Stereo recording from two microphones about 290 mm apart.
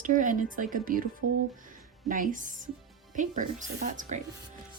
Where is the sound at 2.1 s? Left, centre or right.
Right.